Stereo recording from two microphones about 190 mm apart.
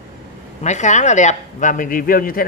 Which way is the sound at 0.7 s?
40° left (ahead or behind).